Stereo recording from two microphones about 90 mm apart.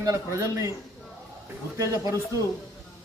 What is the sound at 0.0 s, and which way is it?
Speech, 35° right (ahead or behind).